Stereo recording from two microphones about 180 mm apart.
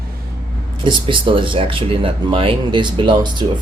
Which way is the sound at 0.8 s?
25° right (ahead or behind).